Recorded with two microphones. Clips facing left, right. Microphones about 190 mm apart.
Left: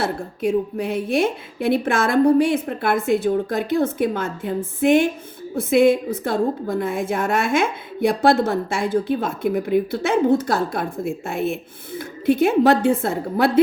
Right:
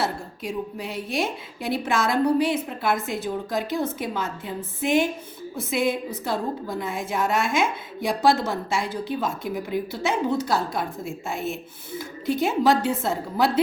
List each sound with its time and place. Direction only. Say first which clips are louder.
0.0 s a woman's voice: left 6 dB; 55° left (ahead or behind)